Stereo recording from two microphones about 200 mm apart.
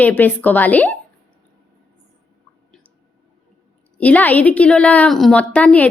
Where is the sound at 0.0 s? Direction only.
10° left (ahead or behind).